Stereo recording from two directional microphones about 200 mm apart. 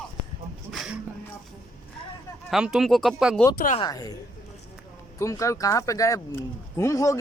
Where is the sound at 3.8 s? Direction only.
20° left (ahead or behind).